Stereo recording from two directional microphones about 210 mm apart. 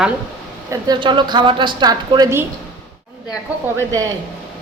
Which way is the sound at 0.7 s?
20° right (ahead or behind).